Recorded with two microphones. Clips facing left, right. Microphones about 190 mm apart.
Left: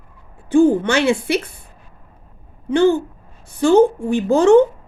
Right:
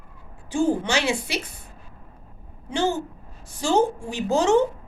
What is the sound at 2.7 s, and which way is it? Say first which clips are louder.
A woman's voice: left 9 dB; 60° left (ahead or behind).